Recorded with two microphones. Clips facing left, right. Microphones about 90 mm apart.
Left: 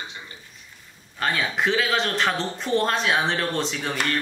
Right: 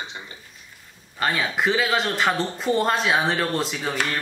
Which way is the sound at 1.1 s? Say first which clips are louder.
Right 1 dB; 5° right (ahead or behind).